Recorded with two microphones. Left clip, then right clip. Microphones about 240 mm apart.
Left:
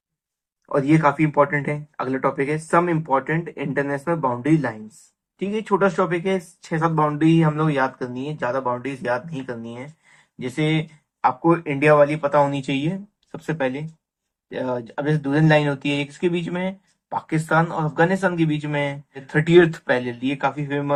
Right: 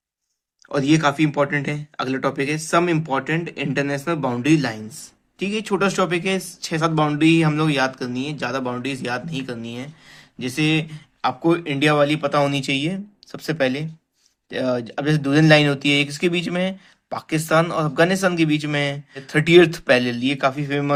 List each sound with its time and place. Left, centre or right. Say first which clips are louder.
0.7 s speech: even; right